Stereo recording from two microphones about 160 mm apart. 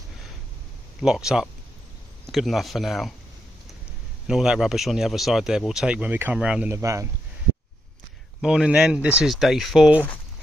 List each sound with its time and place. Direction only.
1.0 s speech: 5° right (ahead or behind)
4.3 s speech: 5° right (ahead or behind)
6.8 s speech: 20° right (ahead or behind)
8.4 s speech: 5° right (ahead or behind)